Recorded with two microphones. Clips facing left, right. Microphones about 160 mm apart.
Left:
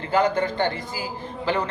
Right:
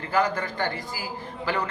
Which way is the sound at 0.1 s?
25° left (ahead or behind).